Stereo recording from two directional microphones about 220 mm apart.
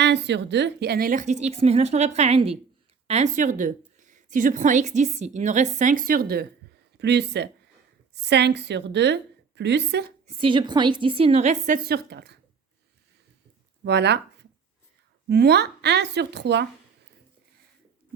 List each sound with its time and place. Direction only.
0.0 s a woman's voice: 50° right (ahead or behind)
10.2 s a woman's voice: 25° right (ahead or behind); by 12.4 s 50° right (ahead or behind)
13.8 s a woman's voice: 50° right (ahead or behind)